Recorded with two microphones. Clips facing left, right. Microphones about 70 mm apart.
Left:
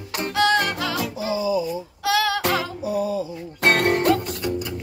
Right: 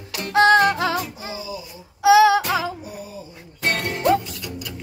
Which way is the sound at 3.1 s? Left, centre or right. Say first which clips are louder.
Left 10 dB; left.